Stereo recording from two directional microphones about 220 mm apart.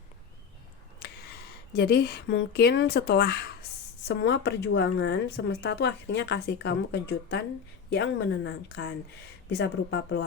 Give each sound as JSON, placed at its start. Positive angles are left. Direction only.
{"t": 1.7, "sound": "speech", "side_deg": 50}